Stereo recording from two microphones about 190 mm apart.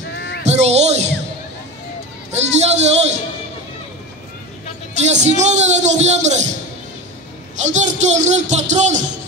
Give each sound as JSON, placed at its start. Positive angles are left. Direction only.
{"t": 0.1, "sound": "music", "side_deg": 65}
{"t": 0.4, "sound": "music", "side_deg": -35}
{"t": 2.3, "sound": "speech", "side_deg": -35}
{"t": 5.0, "sound": "speech", "side_deg": -35}
{"t": 7.6, "sound": "speech", "side_deg": -40}